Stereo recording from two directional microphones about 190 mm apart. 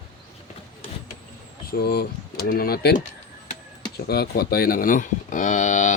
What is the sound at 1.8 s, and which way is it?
Speech, 55° left (ahead or behind).